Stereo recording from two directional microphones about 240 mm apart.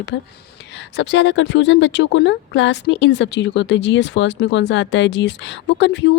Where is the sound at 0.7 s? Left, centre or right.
Left.